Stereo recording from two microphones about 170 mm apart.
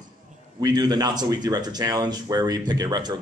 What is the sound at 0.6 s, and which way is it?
Speech, 25° right (ahead or behind).